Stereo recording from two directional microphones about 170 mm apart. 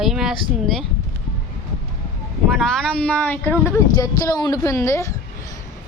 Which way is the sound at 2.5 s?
Centre (ahead or behind).